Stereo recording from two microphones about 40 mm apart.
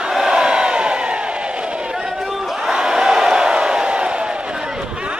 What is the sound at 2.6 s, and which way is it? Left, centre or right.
Crowd, centre.